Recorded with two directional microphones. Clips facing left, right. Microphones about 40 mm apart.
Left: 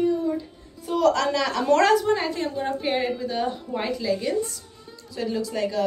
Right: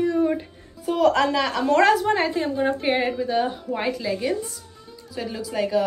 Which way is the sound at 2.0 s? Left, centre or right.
Right.